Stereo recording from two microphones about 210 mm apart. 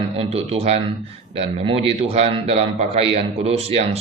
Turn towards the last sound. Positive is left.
turn(degrees=-30)  # may be behind; listen again after turning